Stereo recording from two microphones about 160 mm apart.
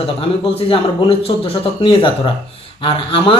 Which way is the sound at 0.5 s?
35° left (ahead or behind).